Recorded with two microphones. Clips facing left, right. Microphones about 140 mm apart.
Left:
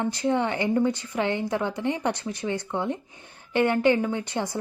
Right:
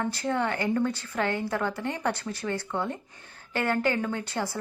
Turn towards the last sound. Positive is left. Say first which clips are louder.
# left 3 dB
turn(degrees=20)  # may be behind; listen again after turning